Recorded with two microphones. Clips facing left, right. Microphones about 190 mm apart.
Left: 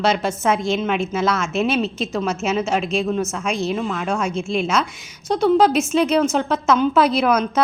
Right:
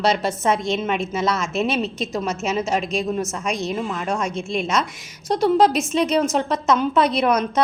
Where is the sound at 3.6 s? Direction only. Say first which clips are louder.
Left 2 dB; centre (ahead or behind).